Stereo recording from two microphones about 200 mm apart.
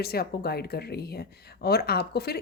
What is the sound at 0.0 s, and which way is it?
A woman's voice, 50° left (ahead or behind).